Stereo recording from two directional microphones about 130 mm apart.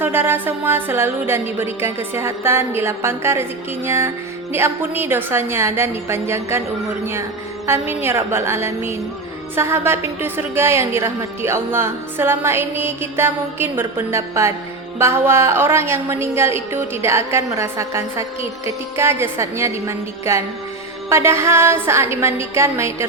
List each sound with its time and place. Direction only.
0.0 s a woman's voice: 15° right (ahead or behind)
7.7 s a woman's voice: 20° right (ahead or behind)